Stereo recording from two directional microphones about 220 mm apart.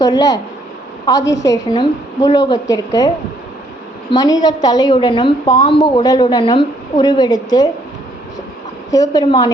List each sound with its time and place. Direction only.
0.0 s a woman's voice: 15° left (ahead or behind)
1.2 s a woman's voice: 55° left (ahead or behind)
1.5 s a woman's voice: 20° left (ahead or behind)
4.1 s a woman's voice: 15° left (ahead or behind)
8.9 s a woman's voice: 15° left (ahead or behind)